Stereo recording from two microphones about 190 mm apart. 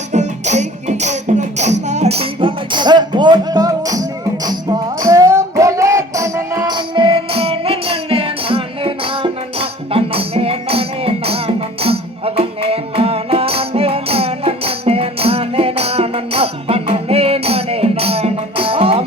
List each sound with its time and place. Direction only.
0.1 s music: 35° right (ahead or behind)